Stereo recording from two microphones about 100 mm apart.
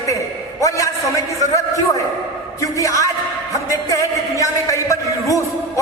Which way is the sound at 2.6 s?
35° left (ahead or behind).